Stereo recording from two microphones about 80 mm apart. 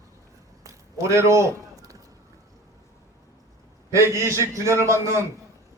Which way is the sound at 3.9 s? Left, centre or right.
Right.